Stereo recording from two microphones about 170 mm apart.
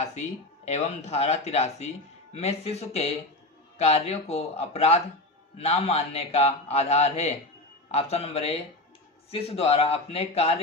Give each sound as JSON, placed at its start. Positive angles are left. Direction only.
{"t": 0.6, "sound": "speech", "side_deg": 40}